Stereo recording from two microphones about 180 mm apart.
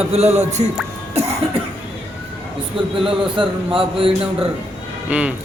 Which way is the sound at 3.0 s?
30° right (ahead or behind).